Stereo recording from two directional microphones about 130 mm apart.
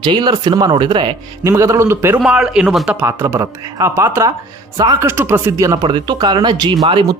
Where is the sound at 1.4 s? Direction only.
20° right (ahead or behind).